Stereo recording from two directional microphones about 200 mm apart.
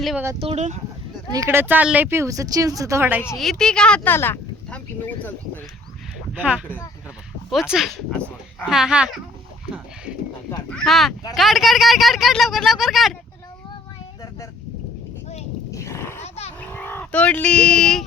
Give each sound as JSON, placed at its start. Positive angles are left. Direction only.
{"t": 0.0, "sound": "speech", "side_deg": 0}
{"t": 0.3, "sound": "speech", "side_deg": -30}
{"t": 1.3, "sound": "speech", "side_deg": -15}
{"t": 3.3, "sound": "speech", "side_deg": 0}
{"t": 7.5, "sound": "speech", "side_deg": 0}
{"t": 10.7, "sound": "speech", "side_deg": 0}
{"t": 15.7, "sound": "a sound", "side_deg": 15}
{"t": 16.2, "sound": "roaring cats", "side_deg": 30}
{"t": 16.6, "sound": "a sound", "side_deg": 10}